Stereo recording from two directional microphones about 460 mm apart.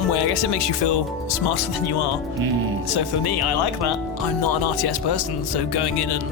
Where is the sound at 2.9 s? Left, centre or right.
Left.